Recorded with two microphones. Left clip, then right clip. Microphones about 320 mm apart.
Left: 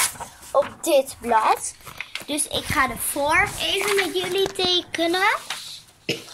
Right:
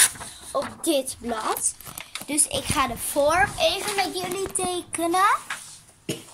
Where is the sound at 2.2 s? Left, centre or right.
Centre.